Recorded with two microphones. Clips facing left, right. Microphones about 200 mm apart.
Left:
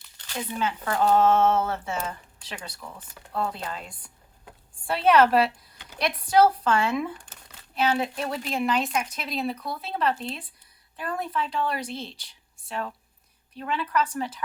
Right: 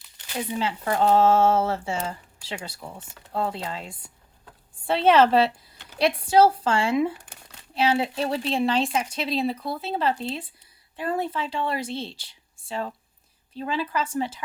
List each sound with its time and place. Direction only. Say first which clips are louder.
0.6 s speech: right 1 dB; 25° right (ahead or behind)